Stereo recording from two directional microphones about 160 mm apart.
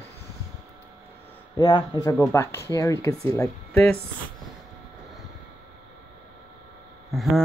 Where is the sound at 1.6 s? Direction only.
25° left (ahead or behind).